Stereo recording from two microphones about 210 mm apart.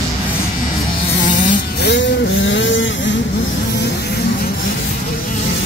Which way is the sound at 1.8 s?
55° left (ahead or behind).